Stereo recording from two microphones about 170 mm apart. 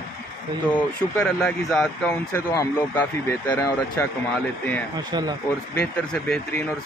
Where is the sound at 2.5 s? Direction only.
15° left (ahead or behind).